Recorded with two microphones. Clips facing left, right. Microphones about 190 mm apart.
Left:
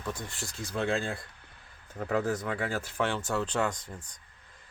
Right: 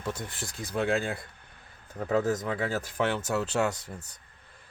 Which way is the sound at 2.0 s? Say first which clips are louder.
Right 3 dB; 20° right (ahead or behind).